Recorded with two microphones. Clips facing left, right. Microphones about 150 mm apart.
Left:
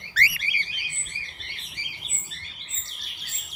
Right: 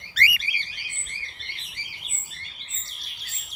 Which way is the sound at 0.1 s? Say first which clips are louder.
Right 1 dB; 25° right (ahead or behind).